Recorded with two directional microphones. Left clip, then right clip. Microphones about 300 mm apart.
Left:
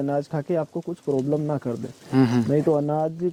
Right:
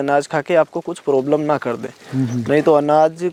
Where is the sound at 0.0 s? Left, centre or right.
Centre.